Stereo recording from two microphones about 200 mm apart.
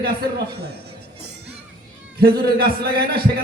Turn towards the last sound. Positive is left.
turn(degrees=-50)  # may be behind; listen again after turning